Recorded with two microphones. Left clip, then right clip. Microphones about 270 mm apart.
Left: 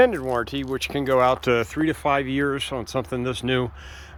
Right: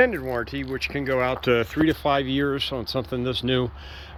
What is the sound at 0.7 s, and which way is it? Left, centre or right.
Speech, left.